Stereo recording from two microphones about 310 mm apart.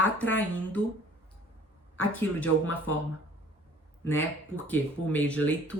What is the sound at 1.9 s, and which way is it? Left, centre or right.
Speech, centre.